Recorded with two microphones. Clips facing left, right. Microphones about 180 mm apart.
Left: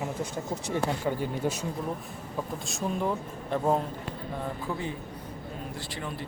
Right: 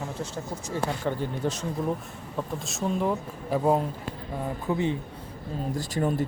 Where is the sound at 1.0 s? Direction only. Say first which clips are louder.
Right 1 dB; 10° left (ahead or behind).